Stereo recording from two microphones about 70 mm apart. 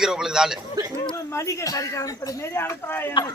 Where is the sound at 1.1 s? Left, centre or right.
Left.